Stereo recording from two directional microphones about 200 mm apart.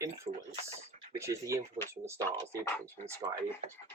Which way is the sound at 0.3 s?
25° right (ahead or behind).